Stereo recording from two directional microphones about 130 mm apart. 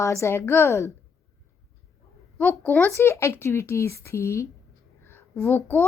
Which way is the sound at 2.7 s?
15° left (ahead or behind).